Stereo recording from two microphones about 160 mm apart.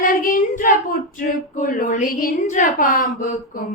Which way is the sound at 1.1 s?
55° left (ahead or behind).